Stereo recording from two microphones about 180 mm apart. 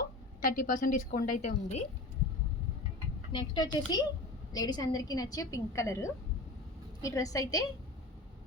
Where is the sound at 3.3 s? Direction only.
25° left (ahead or behind).